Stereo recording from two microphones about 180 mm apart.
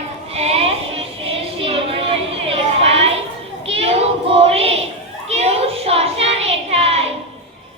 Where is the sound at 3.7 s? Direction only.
35° right (ahead or behind).